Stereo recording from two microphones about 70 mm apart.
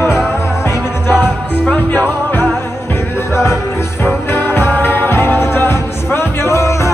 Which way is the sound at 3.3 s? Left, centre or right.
Left.